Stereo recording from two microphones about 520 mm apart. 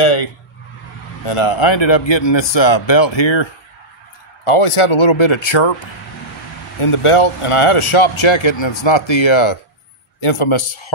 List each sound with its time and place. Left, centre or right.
0.0 s speech: left
4.5 s speech: left
6.8 s a man's voice: left